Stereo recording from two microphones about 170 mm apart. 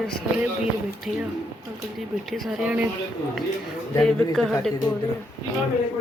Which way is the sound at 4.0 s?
5° left (ahead or behind).